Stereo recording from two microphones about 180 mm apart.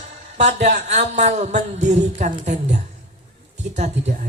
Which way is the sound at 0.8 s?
40° right (ahead or behind).